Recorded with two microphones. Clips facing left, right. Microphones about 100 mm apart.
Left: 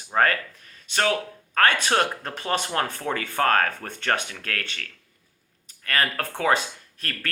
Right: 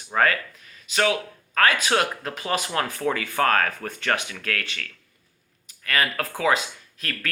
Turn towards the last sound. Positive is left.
turn(degrees=35)  # may be behind; listen again after turning